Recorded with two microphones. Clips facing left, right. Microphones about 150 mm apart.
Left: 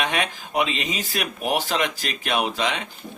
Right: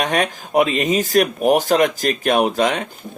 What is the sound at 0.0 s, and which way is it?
Speech, 45° right (ahead or behind).